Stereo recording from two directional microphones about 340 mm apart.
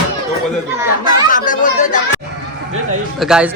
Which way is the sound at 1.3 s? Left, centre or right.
Left.